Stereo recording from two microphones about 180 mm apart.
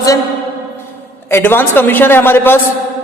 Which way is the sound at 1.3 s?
10° left (ahead or behind).